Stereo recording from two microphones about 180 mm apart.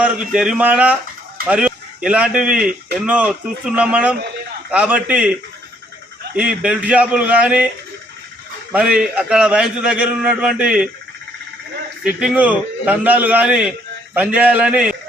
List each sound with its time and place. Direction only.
0.0 s a man's voice: 5° right (ahead or behind)
6.3 s a man's voice: 5° right (ahead or behind)
8.7 s a man's voice: 5° right (ahead or behind)
12.0 s a man's voice: 5° right (ahead or behind)